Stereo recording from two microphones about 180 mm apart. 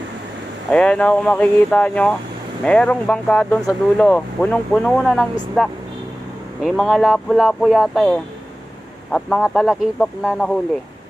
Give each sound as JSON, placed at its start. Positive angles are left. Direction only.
{"t": 0.7, "sound": "speech", "side_deg": 5}